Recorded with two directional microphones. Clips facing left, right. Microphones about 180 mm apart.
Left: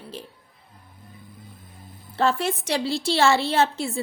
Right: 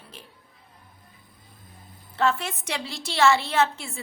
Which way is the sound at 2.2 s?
35° left (ahead or behind).